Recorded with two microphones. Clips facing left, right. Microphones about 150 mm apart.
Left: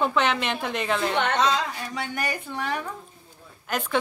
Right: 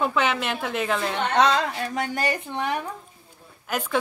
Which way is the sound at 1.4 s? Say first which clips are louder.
Right 3 dB; 60° right (ahead or behind).